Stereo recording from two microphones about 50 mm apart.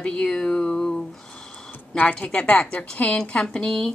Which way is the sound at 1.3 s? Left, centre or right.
Centre.